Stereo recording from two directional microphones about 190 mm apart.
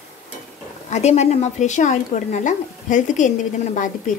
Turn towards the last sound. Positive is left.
turn(degrees=45)  # may be behind; listen again after turning